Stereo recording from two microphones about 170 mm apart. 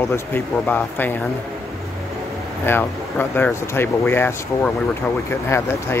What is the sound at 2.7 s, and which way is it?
Speech, 10° left (ahead or behind).